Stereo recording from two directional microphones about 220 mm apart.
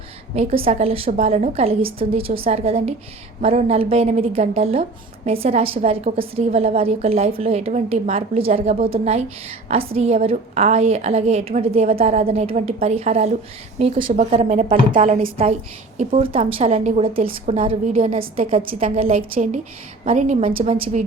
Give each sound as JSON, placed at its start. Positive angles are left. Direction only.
{"t": 0.3, "sound": "a woman's voice", "side_deg": -25}
{"t": 19.1, "sound": "a woman's voice", "side_deg": -35}